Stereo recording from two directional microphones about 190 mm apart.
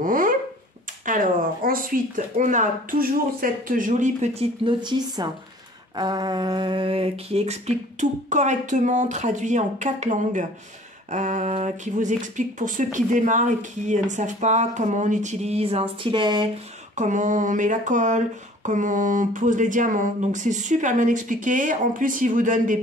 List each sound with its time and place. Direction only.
0.0 s a sound: 45° right (ahead or behind)
1.0 s speech: 45° right (ahead or behind); by 16.4 s 25° right (ahead or behind)
16.9 s speech: 40° right (ahead or behind)